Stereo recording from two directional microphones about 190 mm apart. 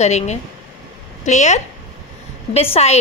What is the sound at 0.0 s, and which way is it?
A woman's voice, 35° left (ahead or behind).